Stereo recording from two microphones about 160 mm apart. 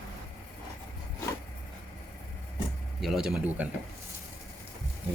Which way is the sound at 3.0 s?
Centre (ahead or behind).